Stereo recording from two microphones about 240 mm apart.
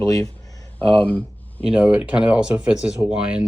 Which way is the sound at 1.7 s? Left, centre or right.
Centre.